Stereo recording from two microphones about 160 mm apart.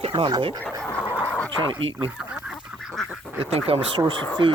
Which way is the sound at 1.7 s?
35° right (ahead or behind).